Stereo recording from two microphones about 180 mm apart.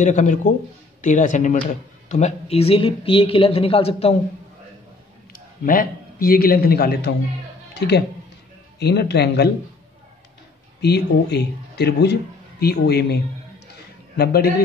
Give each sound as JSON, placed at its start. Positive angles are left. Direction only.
{"t": 0.0, "sound": "speech", "side_deg": 45}
{"t": 5.3, "sound": "a man's voice", "side_deg": 50}
{"t": 7.7, "sound": "music", "side_deg": 70}
{"t": 8.7, "sound": "a man's voice", "side_deg": 65}
{"t": 10.8, "sound": "a man's voice", "side_deg": 65}